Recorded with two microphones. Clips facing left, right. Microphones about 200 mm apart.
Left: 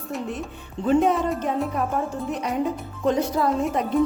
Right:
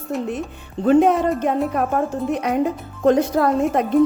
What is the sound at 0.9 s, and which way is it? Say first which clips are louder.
Speech: right 5 dB; 60° right (ahead or behind).